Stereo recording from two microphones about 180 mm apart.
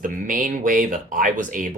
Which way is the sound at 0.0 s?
50° right (ahead or behind).